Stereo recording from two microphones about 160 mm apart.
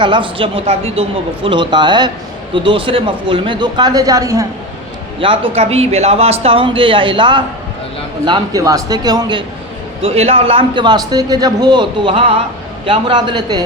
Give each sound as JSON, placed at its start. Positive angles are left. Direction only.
{"t": 0.0, "sound": "a man's voice", "side_deg": -30}
{"t": 5.2, "sound": "a man's voice", "side_deg": -35}
{"t": 10.0, "sound": "a man's voice", "side_deg": -40}